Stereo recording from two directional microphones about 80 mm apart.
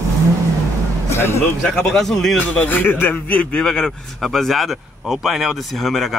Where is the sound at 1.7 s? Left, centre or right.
Centre.